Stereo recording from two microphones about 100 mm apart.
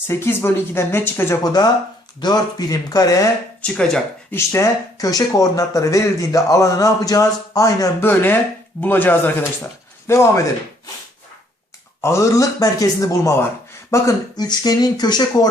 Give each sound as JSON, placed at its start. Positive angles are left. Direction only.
{"t": 0.1, "sound": "speech", "side_deg": 25}
{"t": 1.6, "sound": "speech", "side_deg": 45}
{"t": 3.6, "sound": "speech", "side_deg": 10}
{"t": 4.3, "sound": "speech", "side_deg": 25}
{"t": 8.0, "sound": "speech", "side_deg": 20}
{"t": 12.0, "sound": "speech", "side_deg": 30}
{"t": 14.3, "sound": "speech", "side_deg": 45}